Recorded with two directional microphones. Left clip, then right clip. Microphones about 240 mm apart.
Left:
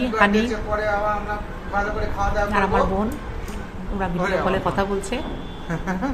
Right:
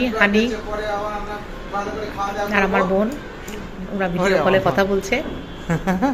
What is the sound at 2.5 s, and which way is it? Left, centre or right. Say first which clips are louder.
Speech: right 4 dB; centre.